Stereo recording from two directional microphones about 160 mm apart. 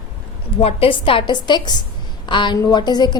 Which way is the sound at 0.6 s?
35° left (ahead or behind).